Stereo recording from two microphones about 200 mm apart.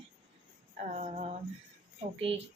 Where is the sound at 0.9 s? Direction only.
35° right (ahead or behind).